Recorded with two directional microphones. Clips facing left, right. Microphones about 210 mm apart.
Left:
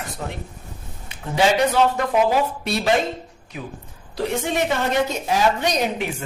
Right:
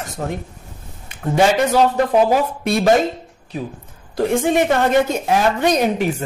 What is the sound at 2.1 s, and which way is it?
Speech, 45° right (ahead or behind).